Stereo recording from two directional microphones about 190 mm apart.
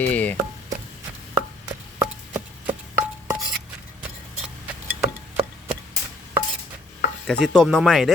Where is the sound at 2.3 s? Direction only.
10° right (ahead or behind).